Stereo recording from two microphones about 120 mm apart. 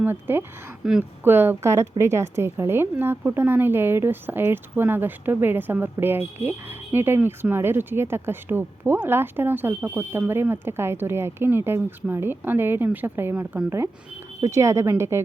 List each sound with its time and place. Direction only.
0.0 s a woman's voice: 15° right (ahead or behind)
0.8 s a woman's voice: 5° right (ahead or behind)
1.2 s a woman's voice: 15° right (ahead or behind)